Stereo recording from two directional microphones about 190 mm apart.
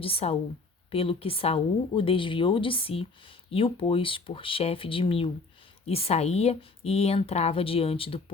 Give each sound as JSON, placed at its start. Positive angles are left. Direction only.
{"t": 0.0, "sound": "speech", "side_deg": 30}